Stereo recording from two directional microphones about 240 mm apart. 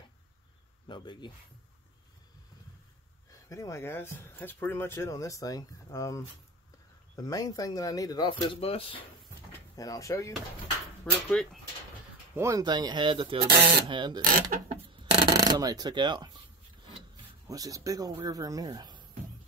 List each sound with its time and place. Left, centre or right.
0.8 s speech: centre
3.3 s speech: centre
11.2 s speech: centre
12.4 s speech: centre
14.2 s speech: right
15.1 s speech: centre